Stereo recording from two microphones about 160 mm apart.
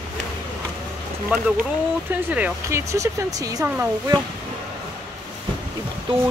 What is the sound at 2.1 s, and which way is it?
Speech, 10° right (ahead or behind).